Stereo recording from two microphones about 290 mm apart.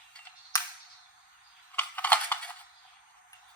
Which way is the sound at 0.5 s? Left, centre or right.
Centre.